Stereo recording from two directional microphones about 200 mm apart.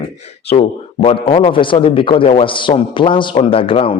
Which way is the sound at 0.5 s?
30° left (ahead or behind).